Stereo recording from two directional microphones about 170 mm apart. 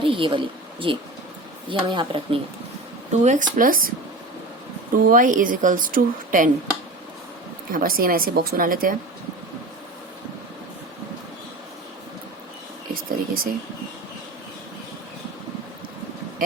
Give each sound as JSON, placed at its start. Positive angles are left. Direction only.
{"t": 0.0, "sound": "a sound", "side_deg": -30}
{"t": 1.9, "sound": "speech", "side_deg": -30}
{"t": 3.1, "sound": "speech", "side_deg": -45}
{"t": 5.0, "sound": "speech", "side_deg": -50}
{"t": 7.7, "sound": "speech", "side_deg": -55}
{"t": 12.9, "sound": "speech", "side_deg": -60}